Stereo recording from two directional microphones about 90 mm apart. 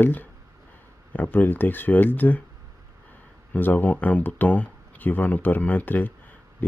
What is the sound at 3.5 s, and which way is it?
Speech, 20° left (ahead or behind).